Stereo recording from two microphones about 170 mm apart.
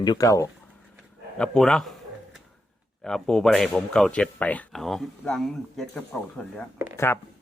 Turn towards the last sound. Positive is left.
turn(degrees=15)  # may be behind; listen again after turning